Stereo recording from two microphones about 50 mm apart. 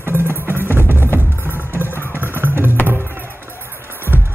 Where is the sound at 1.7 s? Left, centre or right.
Right.